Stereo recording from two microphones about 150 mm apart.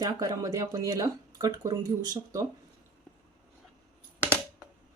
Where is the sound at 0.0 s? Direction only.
25° right (ahead or behind).